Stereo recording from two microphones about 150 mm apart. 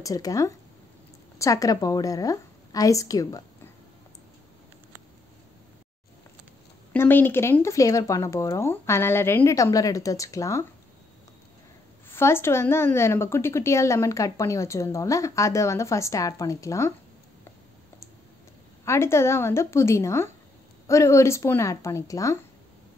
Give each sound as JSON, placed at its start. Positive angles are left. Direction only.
{"t": 0.0, "sound": "speech", "side_deg": 20}
{"t": 6.9, "sound": "speech", "side_deg": 15}
{"t": 12.1, "sound": "speech", "side_deg": 15}
{"t": 18.9, "sound": "a woman's voice", "side_deg": 15}